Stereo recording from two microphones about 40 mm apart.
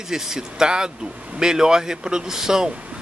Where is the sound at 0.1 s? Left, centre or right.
Centre.